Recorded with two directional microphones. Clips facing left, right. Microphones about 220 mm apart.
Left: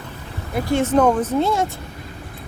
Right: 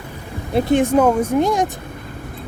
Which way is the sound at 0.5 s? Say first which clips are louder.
Right 3 dB; 15° right (ahead or behind).